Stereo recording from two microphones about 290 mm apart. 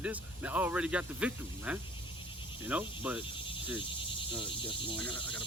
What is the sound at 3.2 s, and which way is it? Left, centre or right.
Cricket, centre.